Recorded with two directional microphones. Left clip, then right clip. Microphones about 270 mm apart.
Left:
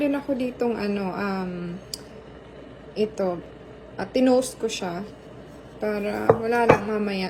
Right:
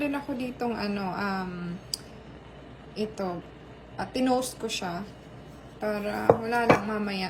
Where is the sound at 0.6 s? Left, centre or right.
Centre.